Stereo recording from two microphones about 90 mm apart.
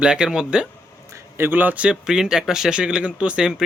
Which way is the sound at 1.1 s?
25° right (ahead or behind).